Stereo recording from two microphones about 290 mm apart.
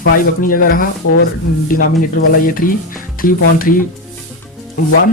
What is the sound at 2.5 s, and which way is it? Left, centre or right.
Speech, left.